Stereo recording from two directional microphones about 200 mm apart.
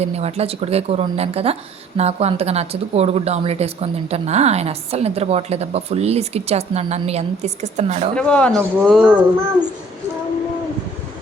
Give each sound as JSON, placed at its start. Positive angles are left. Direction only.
{"t": 0.0, "sound": "a woman's voice", "side_deg": -30}
{"t": 8.1, "sound": "speech", "side_deg": 5}
{"t": 9.0, "sound": "speech", "side_deg": -10}